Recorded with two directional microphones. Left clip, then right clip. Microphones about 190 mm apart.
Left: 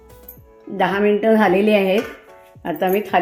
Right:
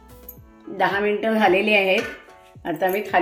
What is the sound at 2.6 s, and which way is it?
Speech, 45° left (ahead or behind).